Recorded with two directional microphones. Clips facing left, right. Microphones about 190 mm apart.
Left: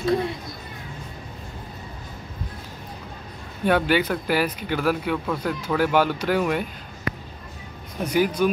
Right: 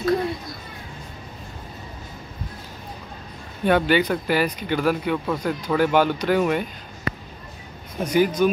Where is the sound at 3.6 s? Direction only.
5° left (ahead or behind).